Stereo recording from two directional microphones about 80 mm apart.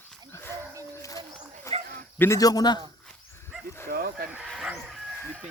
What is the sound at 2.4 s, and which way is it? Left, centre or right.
Speech, left.